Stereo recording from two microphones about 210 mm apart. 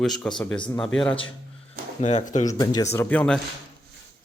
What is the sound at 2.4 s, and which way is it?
Speech, 15° left (ahead or behind).